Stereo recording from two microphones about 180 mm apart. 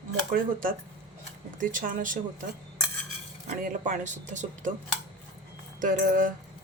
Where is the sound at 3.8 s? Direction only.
45° right (ahead or behind).